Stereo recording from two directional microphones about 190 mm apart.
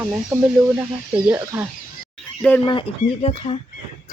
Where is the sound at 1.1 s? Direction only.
5° right (ahead or behind).